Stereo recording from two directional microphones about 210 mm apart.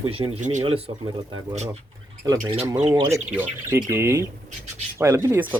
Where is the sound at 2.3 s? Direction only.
20° right (ahead or behind).